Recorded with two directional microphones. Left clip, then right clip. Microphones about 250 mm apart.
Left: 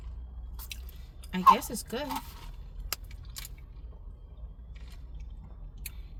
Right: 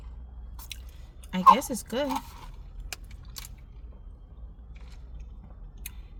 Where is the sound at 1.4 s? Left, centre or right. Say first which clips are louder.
Right 3 dB; centre.